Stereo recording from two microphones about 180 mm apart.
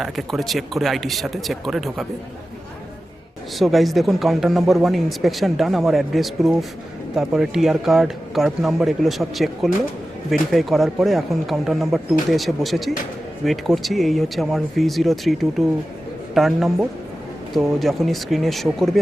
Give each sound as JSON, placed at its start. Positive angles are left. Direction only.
{"t": 0.0, "sound": "speech", "side_deg": 0}
{"t": 3.6, "sound": "speech", "side_deg": 0}